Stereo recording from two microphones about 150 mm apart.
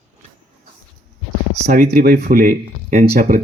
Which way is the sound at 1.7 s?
85° right.